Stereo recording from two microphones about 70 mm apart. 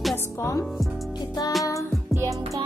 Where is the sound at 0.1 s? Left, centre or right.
Left.